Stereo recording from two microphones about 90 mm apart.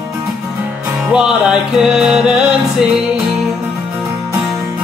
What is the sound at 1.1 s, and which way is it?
Music, 10° right (ahead or behind).